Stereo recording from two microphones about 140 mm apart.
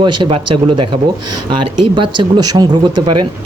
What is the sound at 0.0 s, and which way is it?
Speech, 35° right (ahead or behind).